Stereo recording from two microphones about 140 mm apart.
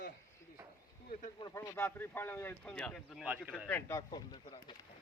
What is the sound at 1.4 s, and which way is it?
Speech, 25° left (ahead or behind).